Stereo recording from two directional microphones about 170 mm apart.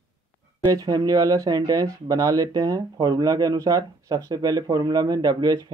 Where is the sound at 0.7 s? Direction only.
20° right (ahead or behind).